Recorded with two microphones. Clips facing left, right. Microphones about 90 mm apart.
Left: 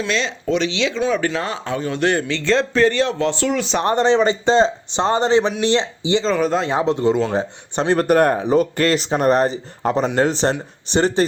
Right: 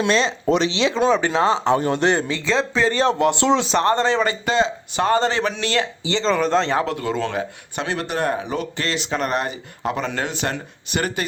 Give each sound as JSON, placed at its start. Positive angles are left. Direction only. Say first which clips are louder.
{"t": 0.1, "sound": "speech", "louder": "right 1 dB", "side_deg": -40}
{"t": 2.4, "sound": "speech", "louder": "left 3 dB", "side_deg": -5}
{"t": 2.9, "sound": "speech", "louder": "right 1 dB", "side_deg": -35}
{"t": 3.2, "sound": "speech", "louder": "right 2 dB", "side_deg": -20}
{"t": 3.8, "sound": "speech", "louder": "left 2 dB", "side_deg": 20}
{"t": 6.2, "sound": "speech", "louder": "right 4 dB", "side_deg": 5}
{"t": 7.3, "sound": "speech", "louder": "left 5 dB", "side_deg": 35}
{"t": 8.0, "sound": "speech", "louder": "left 8 dB", "side_deg": 50}
{"t": 9.0, "sound": "speech", "louder": "left 5 dB", "side_deg": 35}